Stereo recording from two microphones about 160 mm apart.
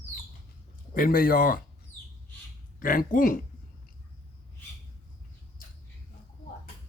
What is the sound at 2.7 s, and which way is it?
Speech, 60° left (ahead or behind).